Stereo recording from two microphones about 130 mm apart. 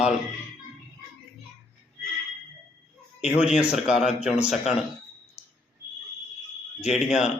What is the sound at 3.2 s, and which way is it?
A man's voice, 10° right (ahead or behind).